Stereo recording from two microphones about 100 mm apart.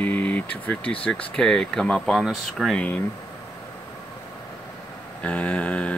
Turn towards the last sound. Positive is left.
turn(degrees=10)  # may be behind; listen again after turning